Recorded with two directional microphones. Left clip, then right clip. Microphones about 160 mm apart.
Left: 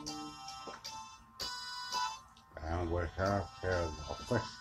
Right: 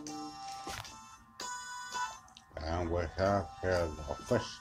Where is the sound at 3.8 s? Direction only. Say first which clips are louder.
Right 3 dB; 30° right (ahead or behind).